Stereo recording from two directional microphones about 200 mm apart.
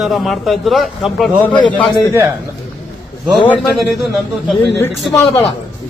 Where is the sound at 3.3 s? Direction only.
Centre (ahead or behind).